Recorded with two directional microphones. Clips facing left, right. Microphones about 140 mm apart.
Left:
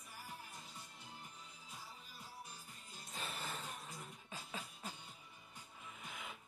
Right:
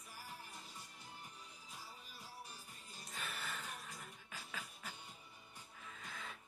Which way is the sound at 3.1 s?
35° left (ahead or behind).